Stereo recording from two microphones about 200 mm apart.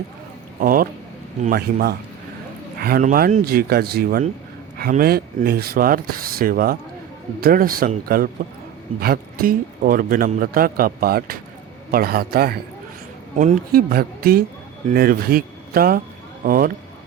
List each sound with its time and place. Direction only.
0.6 s a man's voice: 45° right (ahead or behind)